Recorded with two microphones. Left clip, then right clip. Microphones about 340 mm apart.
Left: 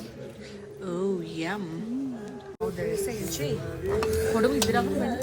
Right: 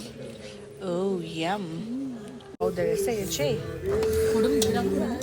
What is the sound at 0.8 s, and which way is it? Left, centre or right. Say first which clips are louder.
Speech: right 2 dB; centre.